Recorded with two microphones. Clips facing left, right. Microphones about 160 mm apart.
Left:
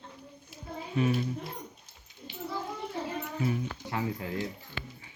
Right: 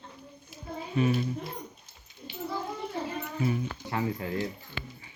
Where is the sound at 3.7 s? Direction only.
55° right (ahead or behind).